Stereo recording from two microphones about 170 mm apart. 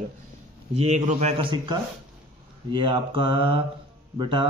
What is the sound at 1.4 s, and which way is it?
Mantra, 30° right (ahead or behind).